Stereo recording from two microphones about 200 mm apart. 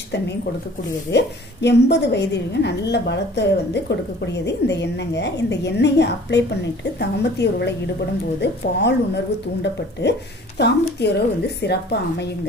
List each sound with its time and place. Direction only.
1.1 s a woman's voice: 60° left (ahead or behind)